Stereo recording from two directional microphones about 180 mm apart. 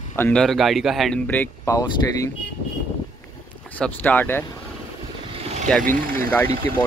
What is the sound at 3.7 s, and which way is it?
Speech, 10° left (ahead or behind).